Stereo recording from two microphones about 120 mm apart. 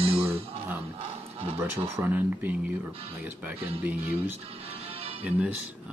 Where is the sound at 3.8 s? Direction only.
15° right (ahead or behind).